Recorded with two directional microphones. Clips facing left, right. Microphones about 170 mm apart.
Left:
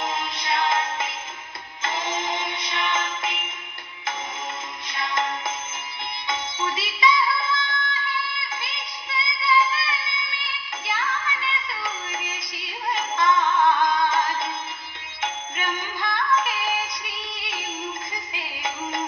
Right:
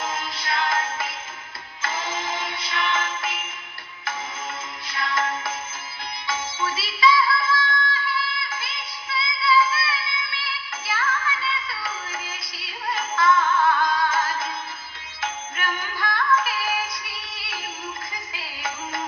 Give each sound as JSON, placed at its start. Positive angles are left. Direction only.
{"t": 0.0, "sound": "music", "side_deg": 20}
{"t": 4.8, "sound": "music", "side_deg": 20}